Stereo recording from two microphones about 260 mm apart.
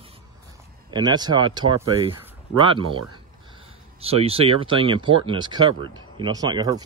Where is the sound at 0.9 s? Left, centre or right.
Centre.